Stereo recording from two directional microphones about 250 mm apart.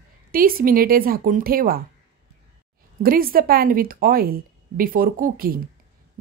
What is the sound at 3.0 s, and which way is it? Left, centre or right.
A woman's voice, right.